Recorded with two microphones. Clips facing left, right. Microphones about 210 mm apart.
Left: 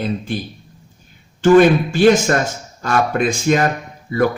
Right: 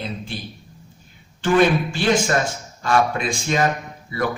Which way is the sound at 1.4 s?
45° left (ahead or behind).